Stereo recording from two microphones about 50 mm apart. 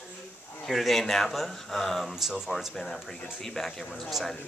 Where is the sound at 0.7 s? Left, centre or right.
Centre.